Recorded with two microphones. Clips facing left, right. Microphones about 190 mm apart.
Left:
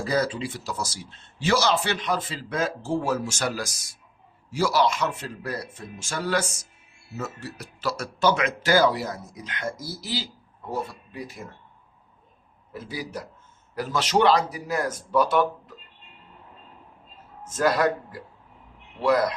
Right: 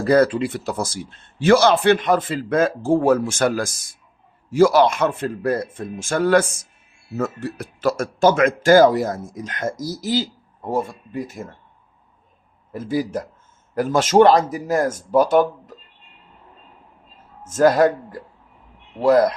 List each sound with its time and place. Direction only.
0.0 s a man's voice: 60° right (ahead or behind)
12.7 s speech: 50° right (ahead or behind)
17.4 s speech: 45° right (ahead or behind)